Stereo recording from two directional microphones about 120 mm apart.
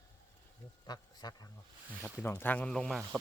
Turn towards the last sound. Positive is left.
turn(degrees=5)  # may be behind; listen again after turning